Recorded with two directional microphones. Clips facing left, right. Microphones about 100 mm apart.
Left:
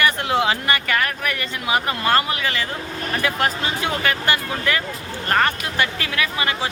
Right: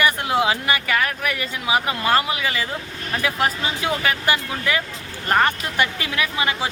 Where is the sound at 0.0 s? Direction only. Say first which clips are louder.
Even; 10° right (ahead or behind).